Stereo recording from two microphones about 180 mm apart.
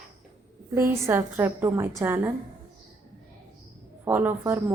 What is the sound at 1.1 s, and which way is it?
A woman's voice, 15° right (ahead or behind).